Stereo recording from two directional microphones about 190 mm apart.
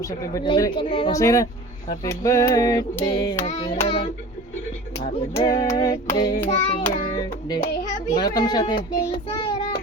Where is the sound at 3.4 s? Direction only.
35° left (ahead or behind).